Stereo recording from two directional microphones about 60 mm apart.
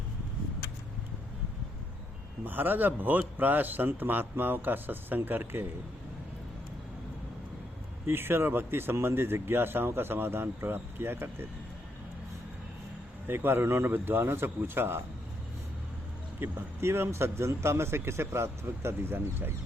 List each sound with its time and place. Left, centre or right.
2.4 s speech: right
8.0 s speech: right
13.2 s speech: right
16.4 s a man's voice: right